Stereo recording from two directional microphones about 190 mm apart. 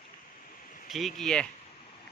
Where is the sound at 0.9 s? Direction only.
Centre (ahead or behind).